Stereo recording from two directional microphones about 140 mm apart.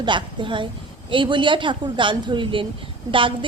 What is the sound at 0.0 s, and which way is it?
A woman's voice, 35° right (ahead or behind).